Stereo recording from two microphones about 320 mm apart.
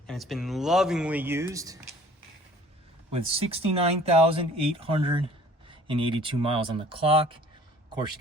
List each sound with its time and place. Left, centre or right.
0.1 s speech: centre
3.1 s speech: centre